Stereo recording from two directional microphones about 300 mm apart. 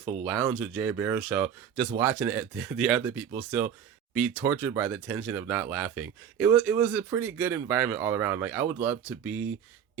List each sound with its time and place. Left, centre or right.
0.0 s speech: right
0.3 s speech: centre